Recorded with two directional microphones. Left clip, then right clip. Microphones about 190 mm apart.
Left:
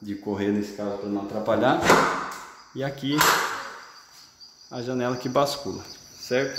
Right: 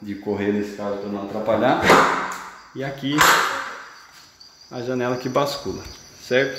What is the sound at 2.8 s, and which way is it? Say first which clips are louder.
Speech: right 1 dB; 25° left (ahead or behind).